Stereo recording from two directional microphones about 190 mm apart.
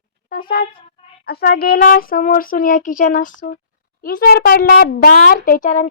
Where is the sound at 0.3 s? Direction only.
50° left (ahead or behind).